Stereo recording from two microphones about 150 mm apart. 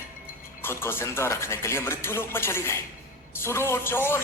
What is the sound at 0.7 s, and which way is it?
Speech, 15° left (ahead or behind).